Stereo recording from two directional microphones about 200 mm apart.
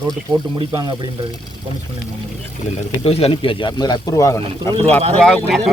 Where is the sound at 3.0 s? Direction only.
30° left (ahead or behind).